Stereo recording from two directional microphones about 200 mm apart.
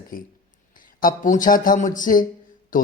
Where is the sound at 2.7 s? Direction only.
40° left (ahead or behind).